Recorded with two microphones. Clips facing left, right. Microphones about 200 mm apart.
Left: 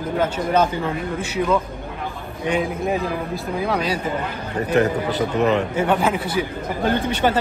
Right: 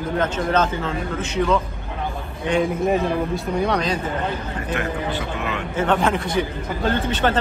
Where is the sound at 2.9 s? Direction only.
Centre (ahead or behind).